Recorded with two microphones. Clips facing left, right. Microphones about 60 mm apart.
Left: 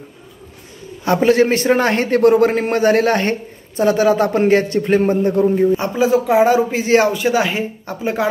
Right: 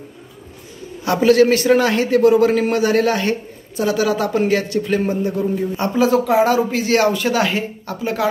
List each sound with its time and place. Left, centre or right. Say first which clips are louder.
1.0 s a man's voice: even; left
5.7 s speech: left 1 dB; centre